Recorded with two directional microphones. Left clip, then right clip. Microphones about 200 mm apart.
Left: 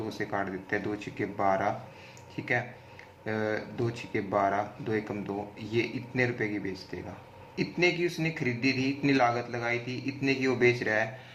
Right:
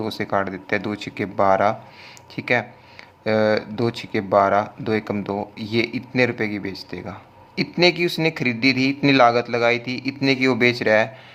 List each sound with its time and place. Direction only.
0.1 s speech: 45° right (ahead or behind)